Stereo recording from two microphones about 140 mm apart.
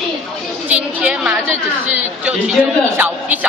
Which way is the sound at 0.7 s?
10° right (ahead or behind).